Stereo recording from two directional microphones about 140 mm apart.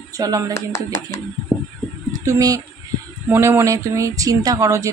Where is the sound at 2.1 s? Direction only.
25° right (ahead or behind).